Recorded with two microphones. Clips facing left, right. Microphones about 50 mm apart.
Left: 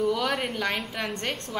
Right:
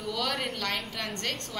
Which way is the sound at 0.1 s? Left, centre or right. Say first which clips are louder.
Left 5 dB; left.